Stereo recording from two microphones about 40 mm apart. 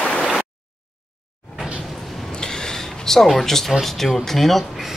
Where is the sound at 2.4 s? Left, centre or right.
Centre.